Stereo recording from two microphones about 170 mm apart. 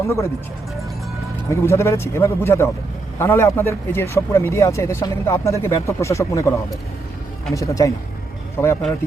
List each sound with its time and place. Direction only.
1.5 s speech: 15° left (ahead or behind)
7.5 s speech: 20° left (ahead or behind)